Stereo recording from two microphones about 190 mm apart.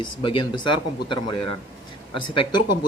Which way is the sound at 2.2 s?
25° left (ahead or behind).